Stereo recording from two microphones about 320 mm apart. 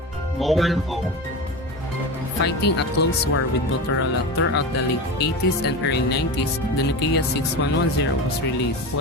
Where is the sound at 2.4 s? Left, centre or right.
Left.